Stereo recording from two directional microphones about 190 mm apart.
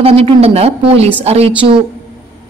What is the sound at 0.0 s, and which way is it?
Speech, 30° right (ahead or behind).